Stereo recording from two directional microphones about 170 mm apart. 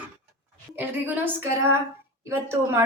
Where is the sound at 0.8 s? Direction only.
10° right (ahead or behind).